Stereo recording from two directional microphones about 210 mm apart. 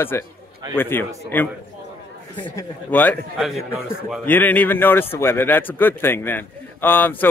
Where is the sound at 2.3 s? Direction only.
25° left (ahead or behind).